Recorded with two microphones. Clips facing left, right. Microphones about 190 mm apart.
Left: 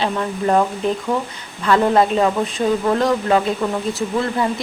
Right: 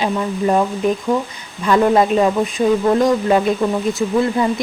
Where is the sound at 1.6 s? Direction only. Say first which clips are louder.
Right 2 dB; 15° right (ahead or behind).